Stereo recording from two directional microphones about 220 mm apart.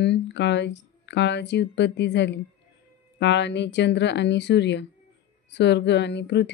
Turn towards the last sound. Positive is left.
turn(degrees=50)  # may be behind; listen again after turning